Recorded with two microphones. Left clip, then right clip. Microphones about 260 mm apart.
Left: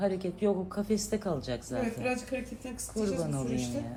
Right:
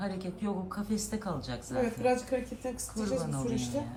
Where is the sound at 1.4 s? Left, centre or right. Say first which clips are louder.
Left 4 dB; left.